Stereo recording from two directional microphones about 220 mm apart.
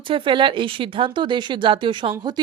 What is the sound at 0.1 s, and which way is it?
A woman's voice, 25° right (ahead or behind).